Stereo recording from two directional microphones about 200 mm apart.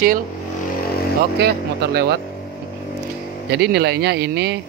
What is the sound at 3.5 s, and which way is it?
Speech, 55° right (ahead or behind).